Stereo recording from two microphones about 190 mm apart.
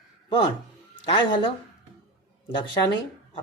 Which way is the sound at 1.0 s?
25° left (ahead or behind).